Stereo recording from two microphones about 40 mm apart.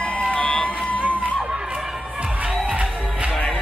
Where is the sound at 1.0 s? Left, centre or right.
Right.